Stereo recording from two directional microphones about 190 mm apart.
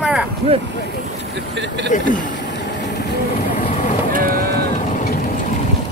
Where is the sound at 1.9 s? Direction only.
45° left (ahead or behind).